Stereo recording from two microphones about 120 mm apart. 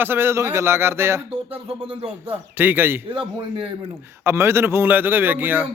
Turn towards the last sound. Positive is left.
turn(degrees=-15)  # may be behind; listen again after turning